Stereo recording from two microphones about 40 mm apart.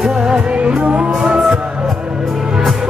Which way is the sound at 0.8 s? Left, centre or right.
Right.